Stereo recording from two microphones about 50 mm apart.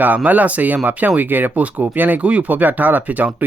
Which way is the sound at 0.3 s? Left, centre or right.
Right.